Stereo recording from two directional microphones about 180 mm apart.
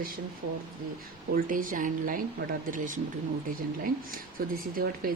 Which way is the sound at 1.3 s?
50° right (ahead or behind).